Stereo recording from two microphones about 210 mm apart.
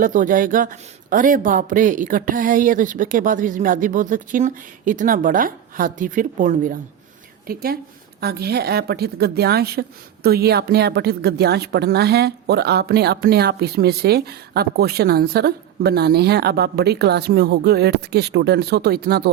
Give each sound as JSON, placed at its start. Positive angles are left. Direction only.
{"t": 0.0, "sound": "a woman's voice", "side_deg": -40}